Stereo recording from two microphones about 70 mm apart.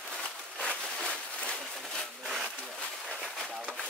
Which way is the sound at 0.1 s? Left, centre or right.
Centre.